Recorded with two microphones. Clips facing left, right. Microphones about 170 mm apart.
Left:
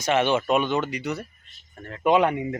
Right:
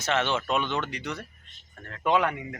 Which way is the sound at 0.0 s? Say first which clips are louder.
Left 5 dB; 15° left (ahead or behind).